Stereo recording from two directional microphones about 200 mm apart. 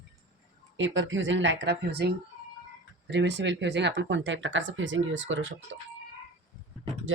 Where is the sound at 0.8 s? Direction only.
70° right (ahead or behind).